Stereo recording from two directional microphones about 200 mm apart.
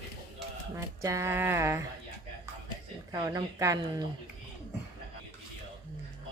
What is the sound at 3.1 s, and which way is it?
Speech, 15° right (ahead or behind).